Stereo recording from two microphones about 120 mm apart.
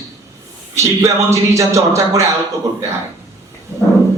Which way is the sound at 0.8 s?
25° right (ahead or behind).